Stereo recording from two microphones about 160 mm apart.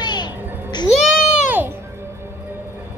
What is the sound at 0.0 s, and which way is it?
Music, 25° left (ahead or behind).